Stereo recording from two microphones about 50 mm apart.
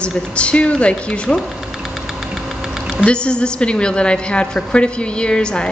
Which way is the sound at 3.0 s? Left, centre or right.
Centre.